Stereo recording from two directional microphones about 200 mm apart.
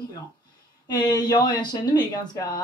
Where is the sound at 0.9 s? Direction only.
20° left (ahead or behind).